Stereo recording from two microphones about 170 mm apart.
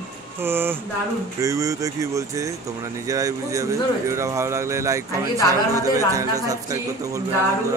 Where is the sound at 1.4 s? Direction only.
20° right (ahead or behind).